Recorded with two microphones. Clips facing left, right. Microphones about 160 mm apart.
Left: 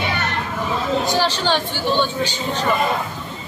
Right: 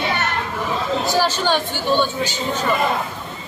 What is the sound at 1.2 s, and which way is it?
Speech, 10° right (ahead or behind).